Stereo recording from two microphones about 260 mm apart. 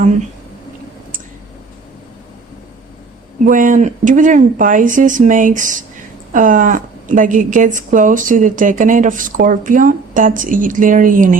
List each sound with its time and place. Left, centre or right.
3.4 s a woman's voice: right